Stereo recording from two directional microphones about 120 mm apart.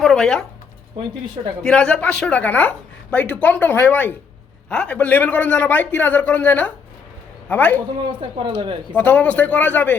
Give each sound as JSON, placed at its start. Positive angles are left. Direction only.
{"t": 0.0, "sound": "a sound", "side_deg": 5}
{"t": 1.6, "sound": "a woman's voice", "side_deg": 5}
{"t": 8.0, "sound": "speech", "side_deg": -45}
{"t": 9.0, "sound": "a woman's voice", "side_deg": 15}